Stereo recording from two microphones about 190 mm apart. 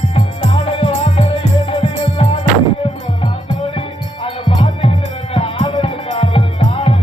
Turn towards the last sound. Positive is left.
turn(degrees=30)  # may be behind; listen again after turning